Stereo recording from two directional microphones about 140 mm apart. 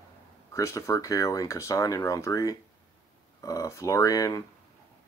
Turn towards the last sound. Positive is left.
turn(degrees=25)  # may be behind; listen again after turning